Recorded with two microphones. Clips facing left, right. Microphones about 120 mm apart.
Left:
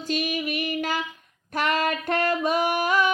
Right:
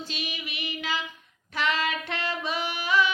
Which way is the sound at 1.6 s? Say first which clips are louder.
Left 3 dB; 50° left (ahead or behind).